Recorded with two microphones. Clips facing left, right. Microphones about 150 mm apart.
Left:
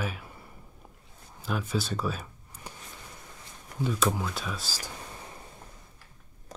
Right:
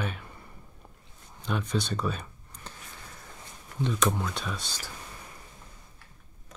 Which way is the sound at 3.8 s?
5° left (ahead or behind).